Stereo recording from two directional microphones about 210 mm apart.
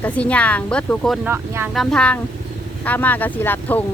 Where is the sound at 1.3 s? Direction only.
10° right (ahead or behind).